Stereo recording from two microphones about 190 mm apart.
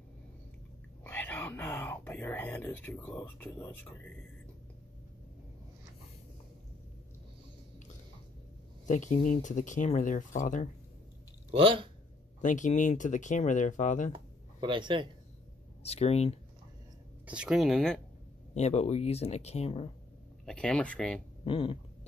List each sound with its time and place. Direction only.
1.0 s a sound: 10° left (ahead or behind)
3.3 s speech: 10° left (ahead or behind)
8.8 s speech: 40° left (ahead or behind)
11.5 s speech: 30° right (ahead or behind)
12.4 s speech: 40° left (ahead or behind)
14.1 s a sound: 25° right (ahead or behind)
15.8 s speech: 35° left (ahead or behind)
17.3 s speech: 5° right (ahead or behind)
18.5 s speech: 35° left (ahead or behind)
20.4 s speech: 5° left (ahead or behind)
21.5 s speech: 30° left (ahead or behind)